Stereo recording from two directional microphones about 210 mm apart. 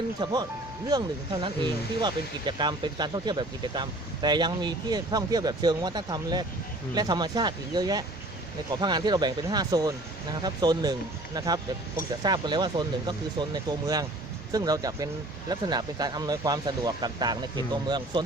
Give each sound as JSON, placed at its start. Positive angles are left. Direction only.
{"t": 0.2, "sound": "speech", "side_deg": -20}